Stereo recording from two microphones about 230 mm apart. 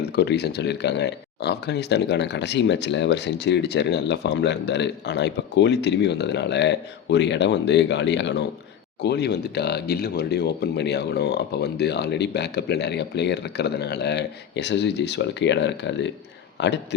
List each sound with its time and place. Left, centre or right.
0.0 s speech: left